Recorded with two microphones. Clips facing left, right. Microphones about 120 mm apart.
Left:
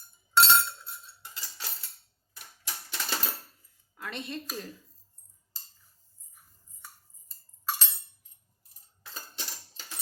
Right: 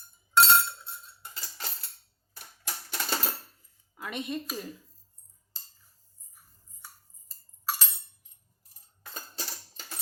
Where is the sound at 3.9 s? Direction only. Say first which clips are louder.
Right 3 dB; 15° right (ahead or behind).